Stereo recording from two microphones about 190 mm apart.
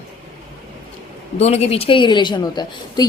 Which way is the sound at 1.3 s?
35° left (ahead or behind).